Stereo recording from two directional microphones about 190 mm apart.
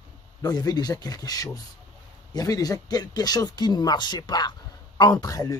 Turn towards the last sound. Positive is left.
turn(degrees=20)  # may be behind; listen again after turning